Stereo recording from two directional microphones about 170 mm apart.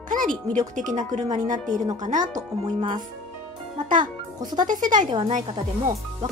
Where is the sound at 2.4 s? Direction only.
25° right (ahead or behind).